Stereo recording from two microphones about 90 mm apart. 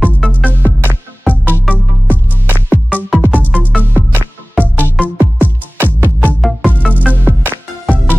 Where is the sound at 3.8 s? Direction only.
20° right (ahead or behind).